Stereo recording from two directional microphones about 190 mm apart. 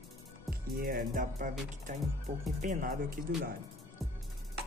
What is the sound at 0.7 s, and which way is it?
Speech, 50° right (ahead or behind).